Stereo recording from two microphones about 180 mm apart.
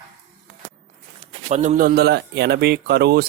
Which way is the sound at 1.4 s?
40° right (ahead or behind).